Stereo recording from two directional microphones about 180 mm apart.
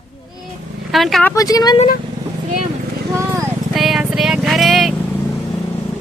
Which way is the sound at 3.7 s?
Centre (ahead or behind).